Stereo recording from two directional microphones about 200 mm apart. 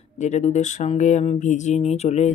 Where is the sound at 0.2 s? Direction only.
35° left (ahead or behind).